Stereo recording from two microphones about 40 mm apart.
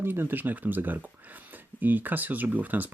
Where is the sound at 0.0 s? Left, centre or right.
Right.